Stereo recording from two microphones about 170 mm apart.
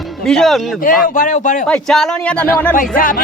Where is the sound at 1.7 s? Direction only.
Centre (ahead or behind).